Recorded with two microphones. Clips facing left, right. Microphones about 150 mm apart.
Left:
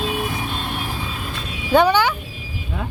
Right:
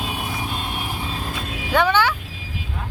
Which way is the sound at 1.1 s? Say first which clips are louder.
Right 1 dB; 35° right (ahead or behind).